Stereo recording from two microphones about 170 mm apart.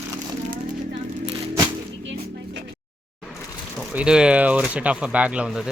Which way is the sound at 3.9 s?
5° right (ahead or behind).